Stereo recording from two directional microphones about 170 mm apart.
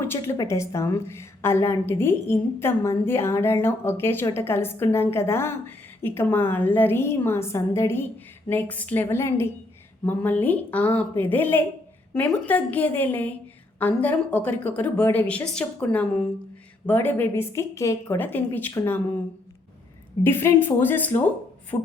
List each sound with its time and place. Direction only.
0.0 s a woman's voice: 15° left (ahead or behind)
20.2 s a woman's voice: 15° left (ahead or behind)